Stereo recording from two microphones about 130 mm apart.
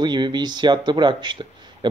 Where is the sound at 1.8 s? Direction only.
35° right (ahead or behind).